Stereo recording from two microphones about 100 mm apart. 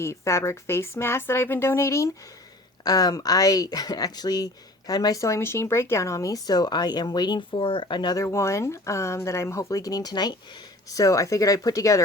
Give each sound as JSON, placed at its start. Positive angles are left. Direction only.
{"t": 0.0, "sound": "speech", "side_deg": 30}
{"t": 2.8, "sound": "speech", "side_deg": 40}
{"t": 8.2, "sound": "speech", "side_deg": 30}